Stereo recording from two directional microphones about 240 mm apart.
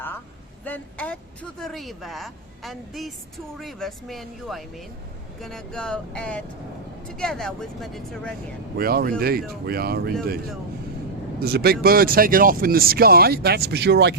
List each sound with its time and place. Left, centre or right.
0.6 s speech: centre
8.8 s speech: right
11.3 s speech: right